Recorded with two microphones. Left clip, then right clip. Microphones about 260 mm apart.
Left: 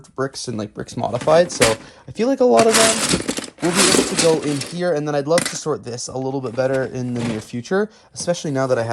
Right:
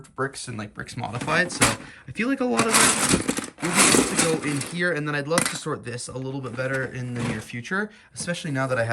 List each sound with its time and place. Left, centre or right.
0.2 s speech: centre
1.5 s speech: centre
4.7 s speech: centre
5.3 s speech: centre
5.6 s speech: centre
6.6 s speech: centre
7.5 s speech: centre